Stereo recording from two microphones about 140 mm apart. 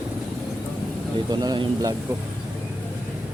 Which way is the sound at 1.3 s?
30° right (ahead or behind).